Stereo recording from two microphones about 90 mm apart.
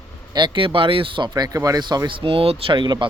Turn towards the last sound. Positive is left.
turn(degrees=-60)  # may be behind; listen again after turning